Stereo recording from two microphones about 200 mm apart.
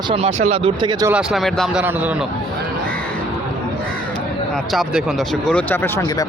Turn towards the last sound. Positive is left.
turn(degrees=5)  # may be behind; listen again after turning